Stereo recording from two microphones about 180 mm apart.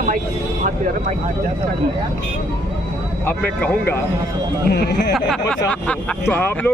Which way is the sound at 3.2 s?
10° left (ahead or behind).